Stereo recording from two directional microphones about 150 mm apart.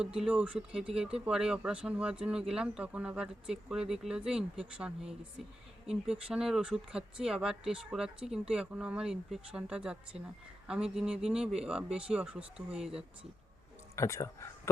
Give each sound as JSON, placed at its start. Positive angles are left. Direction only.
{"t": 0.0, "sound": "speech", "side_deg": -5}
{"t": 13.9, "sound": "speech", "side_deg": 20}